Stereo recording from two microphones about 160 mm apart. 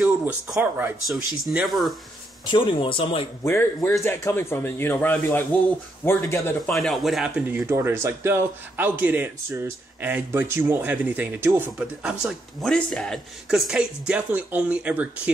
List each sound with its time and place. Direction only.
0.0 s speech: 10° right (ahead or behind)
1.0 s speech: centre (ahead or behind)
2.5 s speech: 30° left (ahead or behind)
4.0 s speech: 15° left (ahead or behind)
6.7 s speech: centre (ahead or behind)
12.6 s speech: 5° left (ahead or behind)